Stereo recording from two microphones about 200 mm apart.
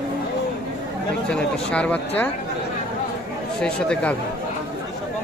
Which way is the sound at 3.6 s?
5° left (ahead or behind).